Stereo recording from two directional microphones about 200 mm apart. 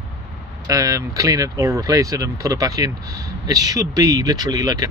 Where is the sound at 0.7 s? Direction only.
15° right (ahead or behind).